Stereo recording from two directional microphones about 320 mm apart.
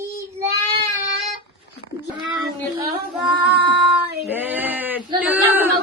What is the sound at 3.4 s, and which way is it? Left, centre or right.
Child singing, centre.